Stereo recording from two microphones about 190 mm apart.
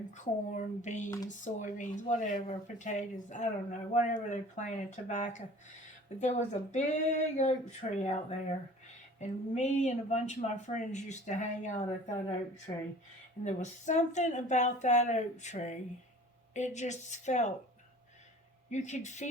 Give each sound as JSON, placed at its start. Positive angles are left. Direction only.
{"t": 0.1, "sound": "speech", "side_deg": 40}
{"t": 12.7, "sound": "speech", "side_deg": 25}
{"t": 13.4, "sound": "speech", "side_deg": 40}
{"t": 18.7, "sound": "speech", "side_deg": 40}